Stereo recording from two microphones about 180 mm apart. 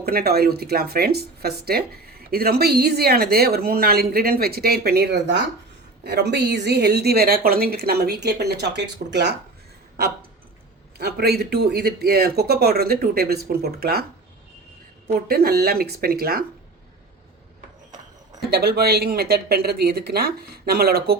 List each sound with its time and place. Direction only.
0.0 s speech: 60° right (ahead or behind)
10.9 s speech: 60° right (ahead or behind)
15.3 s speech: 60° right (ahead or behind)
18.5 s speech: 60° right (ahead or behind)